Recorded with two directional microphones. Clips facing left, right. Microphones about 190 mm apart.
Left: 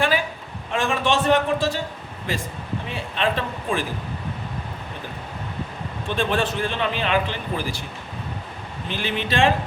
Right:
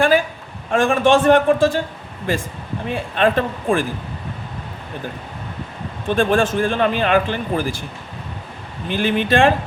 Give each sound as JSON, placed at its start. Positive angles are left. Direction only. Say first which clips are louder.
{"t": 0.7, "sound": "speech", "louder": "right 7 dB", "side_deg": -50}
{"t": 6.1, "sound": "speech", "louder": "right 6 dB", "side_deg": -45}
{"t": 8.9, "sound": "speech", "louder": "right 8 dB", "side_deg": -50}